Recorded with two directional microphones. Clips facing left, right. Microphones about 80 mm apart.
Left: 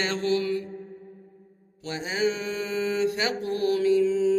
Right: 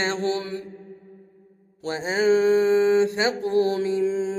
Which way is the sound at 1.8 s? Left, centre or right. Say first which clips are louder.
Right 6 dB; right.